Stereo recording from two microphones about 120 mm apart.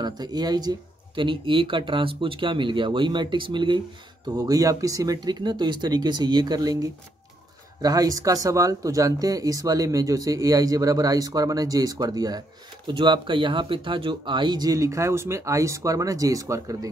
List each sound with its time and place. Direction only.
0.0 s speech: 35° right (ahead or behind)
4.3 s speech: 30° right (ahead or behind)